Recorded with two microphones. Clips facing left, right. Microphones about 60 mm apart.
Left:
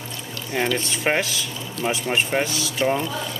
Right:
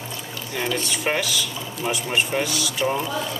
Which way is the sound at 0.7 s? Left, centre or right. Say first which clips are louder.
Left 2 dB; left.